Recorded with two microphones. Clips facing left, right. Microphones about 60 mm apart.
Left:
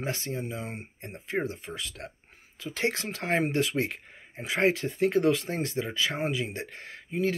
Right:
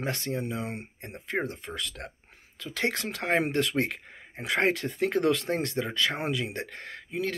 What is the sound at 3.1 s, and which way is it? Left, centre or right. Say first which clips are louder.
Speech: right 2 dB; right.